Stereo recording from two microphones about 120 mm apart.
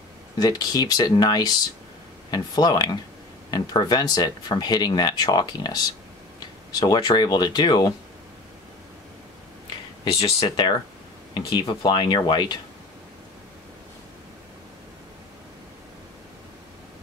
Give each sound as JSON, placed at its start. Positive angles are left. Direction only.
{"t": 0.4, "sound": "speech", "side_deg": 35}
{"t": 10.1, "sound": "speech", "side_deg": 45}